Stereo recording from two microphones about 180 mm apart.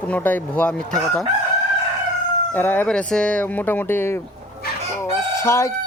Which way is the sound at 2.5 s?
10° left (ahead or behind).